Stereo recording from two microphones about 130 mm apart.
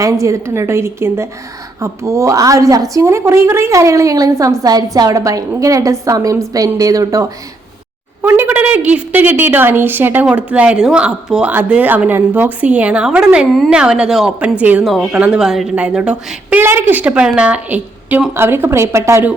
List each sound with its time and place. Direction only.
0.0 s a woman's voice: 25° right (ahead or behind)
8.2 s a woman's voice: 15° right (ahead or behind)